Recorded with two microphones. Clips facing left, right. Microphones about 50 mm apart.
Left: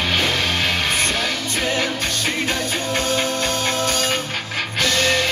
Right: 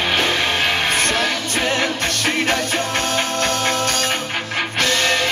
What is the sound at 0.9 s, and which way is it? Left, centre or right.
Music, right.